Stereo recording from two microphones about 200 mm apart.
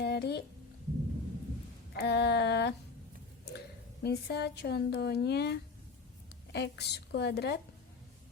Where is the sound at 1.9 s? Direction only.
55° left (ahead or behind).